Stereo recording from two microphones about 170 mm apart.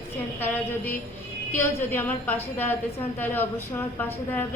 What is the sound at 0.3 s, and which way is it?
A woman's voice, 10° left (ahead or behind).